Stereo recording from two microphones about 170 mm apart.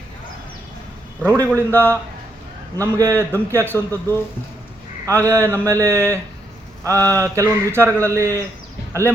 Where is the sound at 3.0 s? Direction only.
20° right (ahead or behind).